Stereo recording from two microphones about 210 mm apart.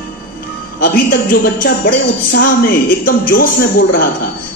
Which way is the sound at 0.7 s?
45° left (ahead or behind).